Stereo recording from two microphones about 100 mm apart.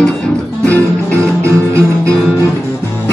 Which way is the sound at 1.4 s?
30° right (ahead or behind).